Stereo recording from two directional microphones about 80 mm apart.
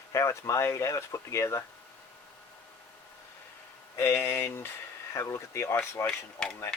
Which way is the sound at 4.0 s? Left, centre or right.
Left.